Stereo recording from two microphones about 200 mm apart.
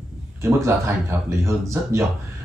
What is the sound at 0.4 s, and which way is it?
Speech, 15° right (ahead or behind).